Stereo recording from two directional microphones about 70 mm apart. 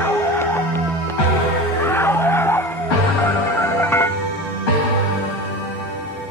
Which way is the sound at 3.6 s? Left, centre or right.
Left.